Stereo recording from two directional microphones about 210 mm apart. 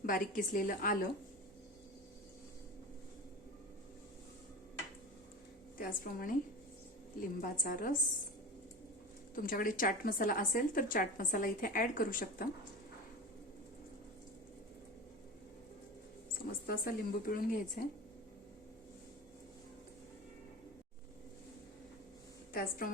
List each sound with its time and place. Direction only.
0.0 s a woman's voice: 40° left (ahead or behind)
5.7 s a woman's voice: 45° left (ahead or behind)
9.3 s a woman's voice: 45° left (ahead or behind)
16.3 s speech: 45° left (ahead or behind)